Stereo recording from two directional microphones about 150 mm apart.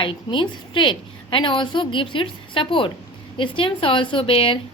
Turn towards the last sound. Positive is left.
turn(degrees=35)  # may be behind; listen again after turning